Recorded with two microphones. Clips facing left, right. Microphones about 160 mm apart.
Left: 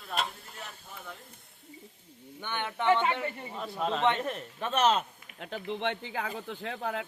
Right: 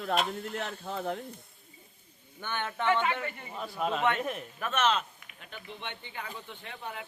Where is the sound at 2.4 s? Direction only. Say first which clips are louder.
Even; 15° left (ahead or behind).